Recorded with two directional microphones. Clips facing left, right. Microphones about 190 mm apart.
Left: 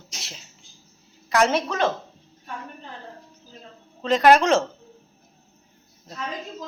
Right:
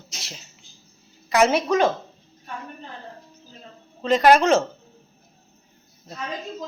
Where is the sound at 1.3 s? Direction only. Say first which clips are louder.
Right 3 dB; 10° right (ahead or behind).